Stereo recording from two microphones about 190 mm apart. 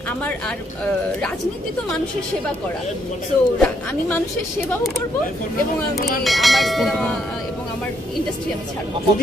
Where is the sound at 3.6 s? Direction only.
10° left (ahead or behind).